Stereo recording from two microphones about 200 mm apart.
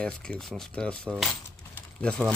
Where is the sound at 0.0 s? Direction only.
5° left (ahead or behind).